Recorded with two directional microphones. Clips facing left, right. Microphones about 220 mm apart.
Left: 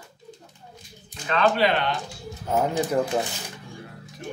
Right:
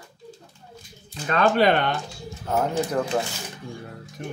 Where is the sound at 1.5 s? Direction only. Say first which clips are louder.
Right 3 dB; 50° right (ahead or behind).